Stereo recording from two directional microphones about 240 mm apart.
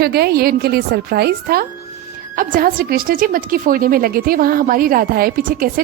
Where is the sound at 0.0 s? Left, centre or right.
Right.